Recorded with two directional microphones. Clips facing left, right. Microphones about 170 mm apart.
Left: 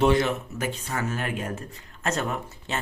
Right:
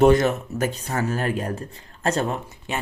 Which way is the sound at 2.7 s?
15° right (ahead or behind).